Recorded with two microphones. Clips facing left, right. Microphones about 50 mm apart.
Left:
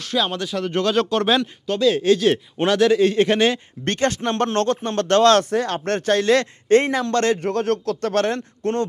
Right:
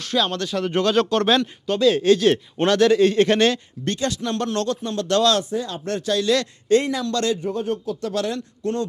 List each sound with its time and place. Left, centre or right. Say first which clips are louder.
0.0 s a man's voice: even; centre
0.3 s speech: even; centre
0.5 s a man's voice: right 1 dB; centre
3.8 s speech: left 3 dB; left
5.4 s speech: left 5 dB; left
7.4 s speech: left 4 dB; left
8.1 s speech: left 4 dB; left